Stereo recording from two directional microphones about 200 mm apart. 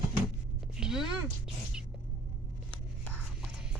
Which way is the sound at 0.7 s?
5° right (ahead or behind).